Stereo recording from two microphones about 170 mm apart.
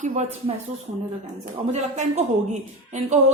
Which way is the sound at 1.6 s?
40° right (ahead or behind).